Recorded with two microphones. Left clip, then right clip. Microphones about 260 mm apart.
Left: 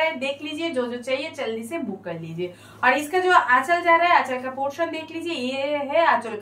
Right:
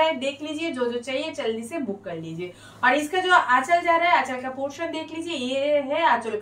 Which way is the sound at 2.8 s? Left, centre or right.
Centre.